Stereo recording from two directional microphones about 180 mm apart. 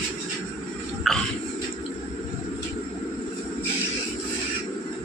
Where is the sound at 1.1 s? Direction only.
Centre (ahead or behind).